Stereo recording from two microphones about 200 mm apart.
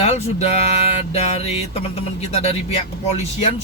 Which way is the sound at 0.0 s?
30° left (ahead or behind).